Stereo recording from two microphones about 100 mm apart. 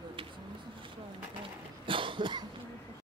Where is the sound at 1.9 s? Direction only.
60° right (ahead or behind).